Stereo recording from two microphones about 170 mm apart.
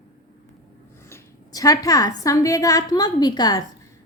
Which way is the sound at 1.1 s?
20° left (ahead or behind).